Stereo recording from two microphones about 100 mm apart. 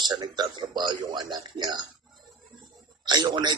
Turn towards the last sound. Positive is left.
turn(degrees=-45)  # may be behind; listen again after turning